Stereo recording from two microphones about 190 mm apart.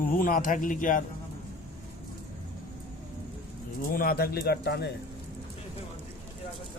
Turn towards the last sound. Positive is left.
turn(degrees=60)  # may be behind; listen again after turning